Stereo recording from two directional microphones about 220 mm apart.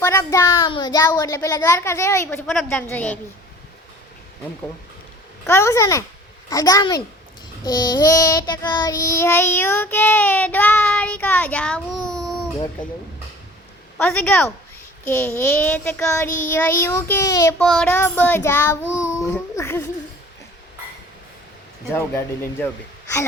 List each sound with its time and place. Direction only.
0.0 s child singing: 10° left (ahead or behind)
2.5 s child singing: centre (ahead or behind)
5.5 s child singing: 10° left (ahead or behind)
14.0 s child singing: 5° left (ahead or behind)
17.6 s child singing: 5° left (ahead or behind)
22.6 s child singing: 10° left (ahead or behind)